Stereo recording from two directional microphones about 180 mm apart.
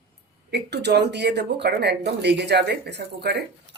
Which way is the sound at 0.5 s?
70° right (ahead or behind).